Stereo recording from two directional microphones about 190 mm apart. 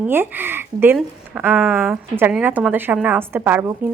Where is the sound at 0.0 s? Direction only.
10° right (ahead or behind).